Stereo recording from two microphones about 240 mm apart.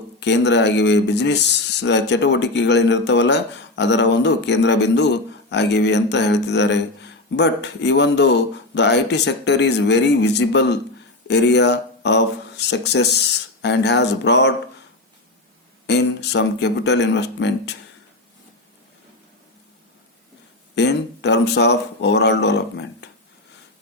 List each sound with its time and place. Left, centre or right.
0.2 s speech: left
15.9 s speech: left
20.7 s speech: left